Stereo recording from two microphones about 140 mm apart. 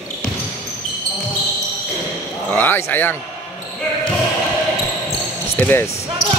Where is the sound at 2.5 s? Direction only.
15° left (ahead or behind).